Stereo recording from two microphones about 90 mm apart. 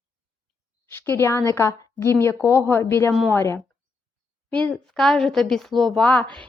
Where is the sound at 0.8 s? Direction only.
25° left (ahead or behind).